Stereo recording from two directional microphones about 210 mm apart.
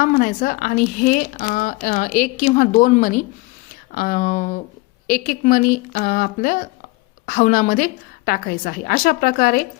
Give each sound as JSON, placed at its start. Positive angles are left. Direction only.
{"t": 0.0, "sound": "a woman's voice", "side_deg": 40}